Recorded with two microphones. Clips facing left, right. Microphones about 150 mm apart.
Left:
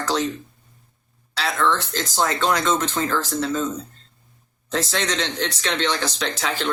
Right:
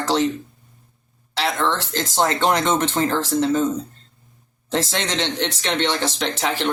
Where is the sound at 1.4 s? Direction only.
25° right (ahead or behind).